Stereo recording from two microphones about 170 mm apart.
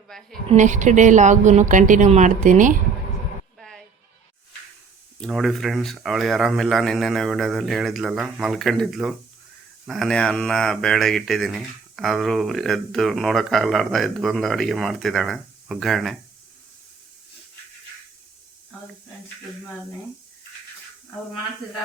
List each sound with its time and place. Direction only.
0.1 s speech: 5° left (ahead or behind)
0.4 s a woman's voice: 45° right (ahead or behind)
3.6 s music: centre (ahead or behind)
5.2 s speech: centre (ahead or behind)